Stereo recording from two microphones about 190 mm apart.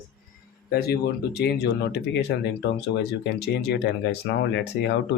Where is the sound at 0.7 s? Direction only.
55° left (ahead or behind).